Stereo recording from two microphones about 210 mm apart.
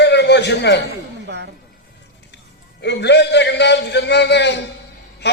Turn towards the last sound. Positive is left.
turn(degrees=55)  # may be behind; listen again after turning